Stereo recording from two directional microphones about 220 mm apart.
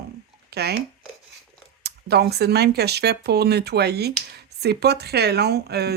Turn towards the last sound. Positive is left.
turn(degrees=-45)  # may be behind; listen again after turning